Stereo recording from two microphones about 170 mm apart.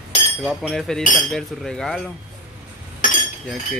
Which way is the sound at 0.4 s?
Centre (ahead or behind).